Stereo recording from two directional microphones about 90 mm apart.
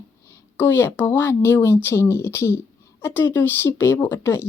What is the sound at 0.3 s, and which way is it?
Speech, 25° left (ahead or behind).